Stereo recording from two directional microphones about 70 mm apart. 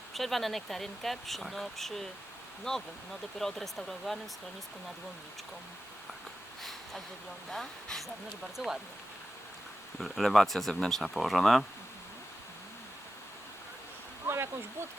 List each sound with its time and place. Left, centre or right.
0.1 s speech: centre
6.6 s a sound: centre
7.5 s speech: centre
10.0 s speech: centre
14.3 s speech: right